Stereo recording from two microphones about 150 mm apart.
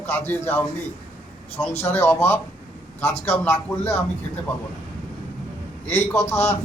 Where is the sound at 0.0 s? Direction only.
15° left (ahead or behind).